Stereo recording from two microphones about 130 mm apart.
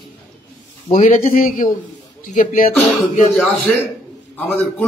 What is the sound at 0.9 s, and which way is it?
Speech, 80° left.